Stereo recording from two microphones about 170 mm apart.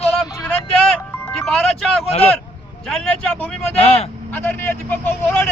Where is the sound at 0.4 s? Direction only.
5° left (ahead or behind).